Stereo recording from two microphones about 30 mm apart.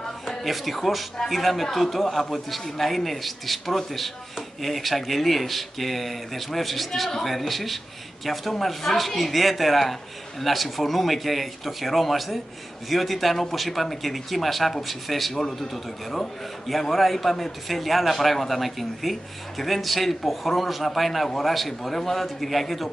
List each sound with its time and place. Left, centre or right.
0.3 s a man's voice: centre
15.3 s speech: centre
16.9 s a man's voice: centre